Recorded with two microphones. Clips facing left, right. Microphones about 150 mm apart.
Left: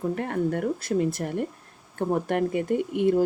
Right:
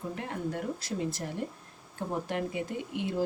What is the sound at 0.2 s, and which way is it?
Speech, 55° left (ahead or behind).